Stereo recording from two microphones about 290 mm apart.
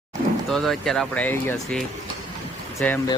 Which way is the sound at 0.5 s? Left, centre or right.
Centre.